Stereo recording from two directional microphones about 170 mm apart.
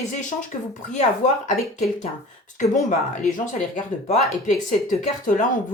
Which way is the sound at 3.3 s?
50° left (ahead or behind).